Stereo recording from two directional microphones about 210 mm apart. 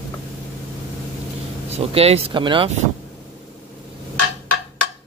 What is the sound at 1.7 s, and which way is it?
Speech, 30° right (ahead or behind).